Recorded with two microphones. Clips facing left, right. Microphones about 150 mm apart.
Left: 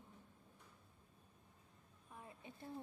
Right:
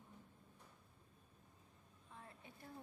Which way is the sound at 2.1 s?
15° left (ahead or behind).